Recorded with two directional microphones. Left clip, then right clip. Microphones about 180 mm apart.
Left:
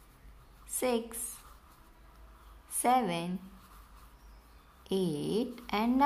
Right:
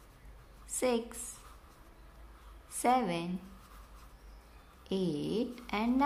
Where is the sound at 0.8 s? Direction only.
Centre (ahead or behind).